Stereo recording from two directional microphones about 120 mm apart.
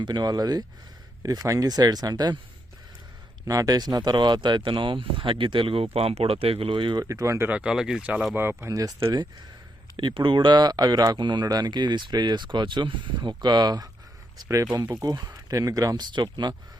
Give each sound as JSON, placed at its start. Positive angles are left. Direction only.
{"t": 0.0, "sound": "speech", "side_deg": -35}
{"t": 3.4, "sound": "speech", "side_deg": -30}
{"t": 7.0, "sound": "speech", "side_deg": -25}
{"t": 7.4, "sound": "speech", "side_deg": -10}
{"t": 8.4, "sound": "speech", "side_deg": -20}
{"t": 10.0, "sound": "speech", "side_deg": -40}